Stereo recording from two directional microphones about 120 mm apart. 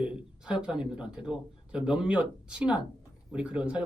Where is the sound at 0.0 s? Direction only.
5° right (ahead or behind).